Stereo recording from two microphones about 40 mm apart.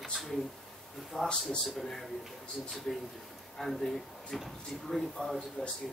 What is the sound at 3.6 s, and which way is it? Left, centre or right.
Speech, centre.